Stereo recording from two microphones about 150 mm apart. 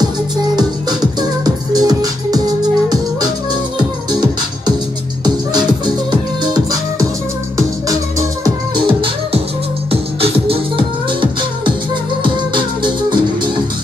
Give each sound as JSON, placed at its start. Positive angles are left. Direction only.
{"t": 1.4, "sound": "music", "side_deg": -25}
{"t": 8.7, "sound": "music", "side_deg": -35}